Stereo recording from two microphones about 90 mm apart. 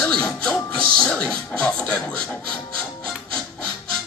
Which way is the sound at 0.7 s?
10° left (ahead or behind).